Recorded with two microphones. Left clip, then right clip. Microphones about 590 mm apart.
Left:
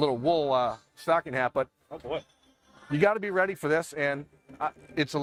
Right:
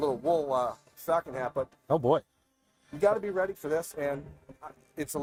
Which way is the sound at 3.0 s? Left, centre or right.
Left.